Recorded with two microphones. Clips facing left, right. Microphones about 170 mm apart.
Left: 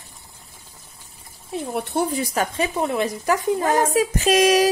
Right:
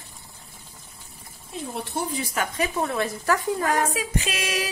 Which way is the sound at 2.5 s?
20° left (ahead or behind).